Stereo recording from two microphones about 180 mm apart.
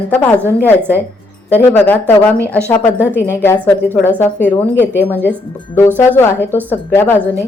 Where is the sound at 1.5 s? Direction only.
10° left (ahead or behind).